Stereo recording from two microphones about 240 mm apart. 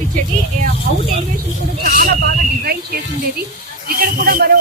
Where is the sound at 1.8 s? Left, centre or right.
Right.